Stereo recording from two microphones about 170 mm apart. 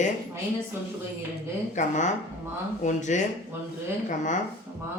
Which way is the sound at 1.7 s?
45° left (ahead or behind).